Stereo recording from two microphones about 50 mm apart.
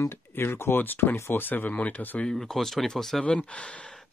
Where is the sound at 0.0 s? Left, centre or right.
Left.